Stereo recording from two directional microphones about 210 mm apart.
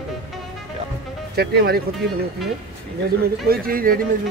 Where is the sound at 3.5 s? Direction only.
45° right (ahead or behind).